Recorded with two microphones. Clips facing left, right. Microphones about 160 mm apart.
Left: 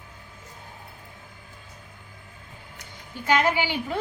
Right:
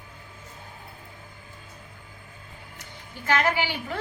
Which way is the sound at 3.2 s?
15° left (ahead or behind).